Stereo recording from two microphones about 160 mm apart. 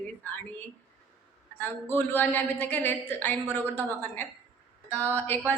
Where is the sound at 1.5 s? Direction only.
10° left (ahead or behind).